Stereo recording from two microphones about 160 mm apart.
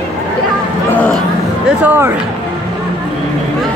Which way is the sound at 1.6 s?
10° right (ahead or behind).